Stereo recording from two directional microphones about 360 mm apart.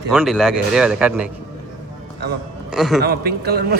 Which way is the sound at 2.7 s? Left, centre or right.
Centre.